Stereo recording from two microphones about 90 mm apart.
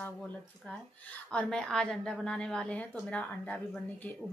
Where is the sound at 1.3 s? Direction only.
10° left (ahead or behind).